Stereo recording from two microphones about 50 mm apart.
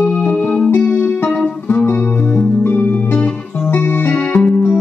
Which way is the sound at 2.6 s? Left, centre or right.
Left.